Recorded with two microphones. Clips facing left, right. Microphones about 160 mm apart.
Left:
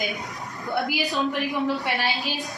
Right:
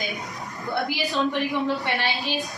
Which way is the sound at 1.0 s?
Centre (ahead or behind).